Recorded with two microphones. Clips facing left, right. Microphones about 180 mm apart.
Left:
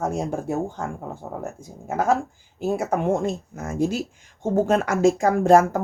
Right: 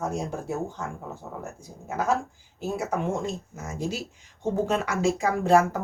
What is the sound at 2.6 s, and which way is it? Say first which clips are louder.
Speech: left 5 dB; 55° left (ahead or behind).